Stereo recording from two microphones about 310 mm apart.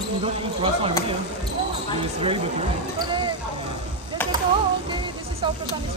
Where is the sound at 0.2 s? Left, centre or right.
Centre.